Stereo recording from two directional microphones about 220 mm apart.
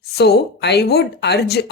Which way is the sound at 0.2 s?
50° left (ahead or behind).